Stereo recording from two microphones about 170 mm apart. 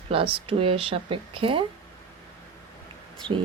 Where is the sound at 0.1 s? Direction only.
30° right (ahead or behind).